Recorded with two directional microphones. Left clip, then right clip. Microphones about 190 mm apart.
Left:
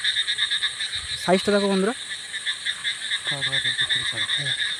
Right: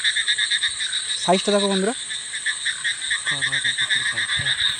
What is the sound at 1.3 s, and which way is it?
Speech, 5° left (ahead or behind).